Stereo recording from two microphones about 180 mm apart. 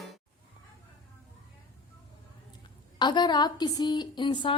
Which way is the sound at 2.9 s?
25° left (ahead or behind).